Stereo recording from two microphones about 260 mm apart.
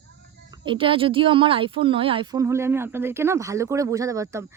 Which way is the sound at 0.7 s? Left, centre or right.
Centre.